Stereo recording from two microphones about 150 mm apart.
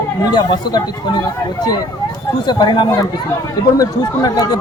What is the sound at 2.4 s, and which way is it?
A man's voice, 30° left (ahead or behind).